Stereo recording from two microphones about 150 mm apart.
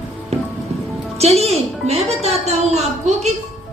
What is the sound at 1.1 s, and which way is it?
Music, 45° right (ahead or behind).